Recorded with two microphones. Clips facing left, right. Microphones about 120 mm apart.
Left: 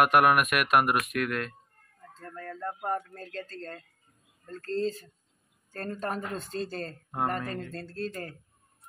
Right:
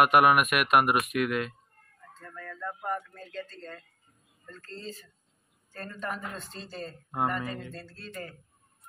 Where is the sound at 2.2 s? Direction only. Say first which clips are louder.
Left 2 dB; 40° left (ahead or behind).